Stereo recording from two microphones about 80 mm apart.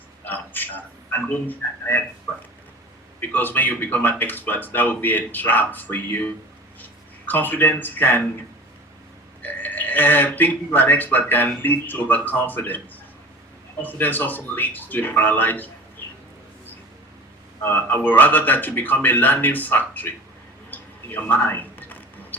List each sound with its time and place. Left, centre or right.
0.3 s a sound: left
1.3 s speech: left
3.2 s speech: left
9.4 s speech: left
13.8 s speech: left
17.6 s speech: left
20.7 s a sound: left